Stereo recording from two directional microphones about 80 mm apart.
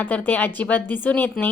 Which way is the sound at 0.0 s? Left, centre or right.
Centre.